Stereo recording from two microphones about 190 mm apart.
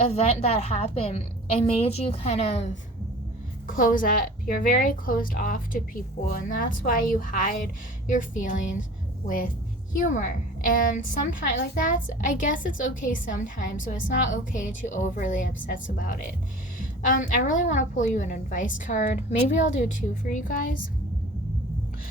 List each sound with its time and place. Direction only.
0.1 s a woman's voice: 35° left (ahead or behind)
3.7 s a woman's voice: 45° left (ahead or behind)